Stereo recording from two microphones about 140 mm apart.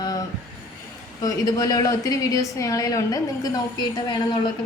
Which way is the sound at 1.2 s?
25° left (ahead or behind).